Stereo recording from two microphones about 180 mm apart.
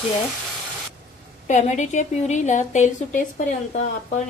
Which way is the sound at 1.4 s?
40° left (ahead or behind).